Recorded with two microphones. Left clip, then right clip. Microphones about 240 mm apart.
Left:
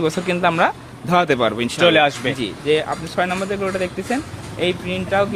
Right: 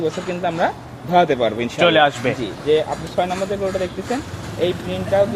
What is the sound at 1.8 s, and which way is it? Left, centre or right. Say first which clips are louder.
Speech: even; centre.